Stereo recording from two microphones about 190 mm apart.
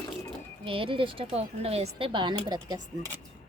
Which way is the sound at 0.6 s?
30° right (ahead or behind).